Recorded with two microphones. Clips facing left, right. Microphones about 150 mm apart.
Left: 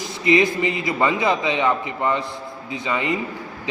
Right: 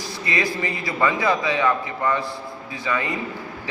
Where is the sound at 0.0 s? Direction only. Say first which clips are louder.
Left 8 dB; 20° left (ahead or behind).